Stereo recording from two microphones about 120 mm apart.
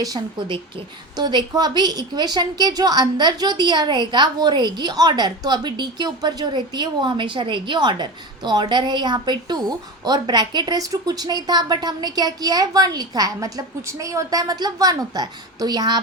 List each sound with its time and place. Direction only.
0.0 s a woman's voice: 35° right (ahead or behind)